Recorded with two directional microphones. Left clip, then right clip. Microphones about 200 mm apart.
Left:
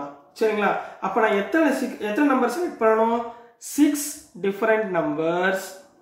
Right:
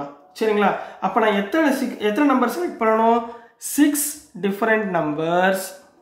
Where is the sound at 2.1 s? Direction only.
40° right (ahead or behind).